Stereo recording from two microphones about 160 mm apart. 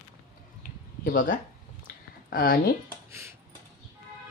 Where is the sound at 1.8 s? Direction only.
65° left (ahead or behind).